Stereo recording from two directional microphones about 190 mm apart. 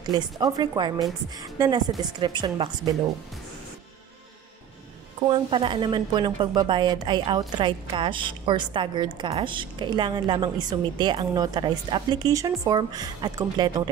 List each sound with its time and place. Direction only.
0.1 s speech: 20° right (ahead or behind)
5.3 s speech: 25° right (ahead or behind)